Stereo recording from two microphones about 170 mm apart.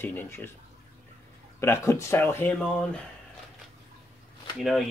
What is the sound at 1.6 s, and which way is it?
Speech, 15° left (ahead or behind).